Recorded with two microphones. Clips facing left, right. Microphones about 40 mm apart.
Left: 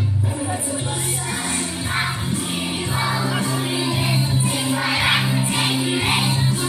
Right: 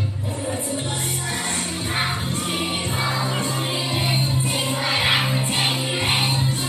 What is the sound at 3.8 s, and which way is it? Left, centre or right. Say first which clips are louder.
Music: left 1 dB; right.